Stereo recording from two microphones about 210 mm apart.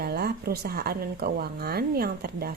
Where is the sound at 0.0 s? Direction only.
50° right (ahead or behind).